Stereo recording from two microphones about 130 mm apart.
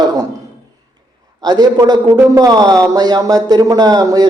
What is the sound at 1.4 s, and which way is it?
Speech, 30° right (ahead or behind).